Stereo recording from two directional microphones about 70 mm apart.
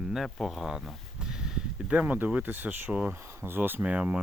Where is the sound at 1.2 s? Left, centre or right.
Centre.